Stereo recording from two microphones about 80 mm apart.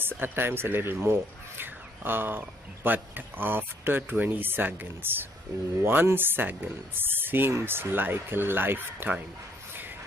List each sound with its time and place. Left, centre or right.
0.2 s speech: right